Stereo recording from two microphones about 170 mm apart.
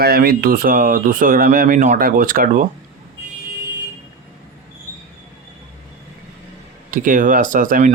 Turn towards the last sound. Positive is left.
turn(degrees=-50)  # may be behind; listen again after turning